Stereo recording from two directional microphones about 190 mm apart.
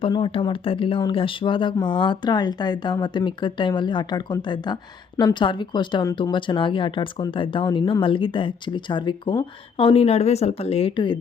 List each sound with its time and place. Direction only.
0.0 s speech: 25° left (ahead or behind)